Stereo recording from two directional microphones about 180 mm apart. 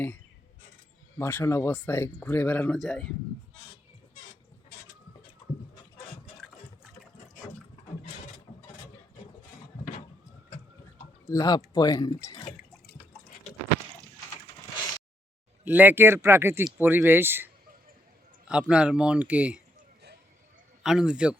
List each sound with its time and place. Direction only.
1.2 s speech: 15° left (ahead or behind)
11.3 s speech: 20° left (ahead or behind)
15.6 s speech: 10° right (ahead or behind)
20.8 s speech: 5° right (ahead or behind)